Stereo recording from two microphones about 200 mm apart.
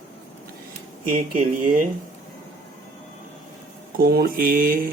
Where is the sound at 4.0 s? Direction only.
50° right (ahead or behind).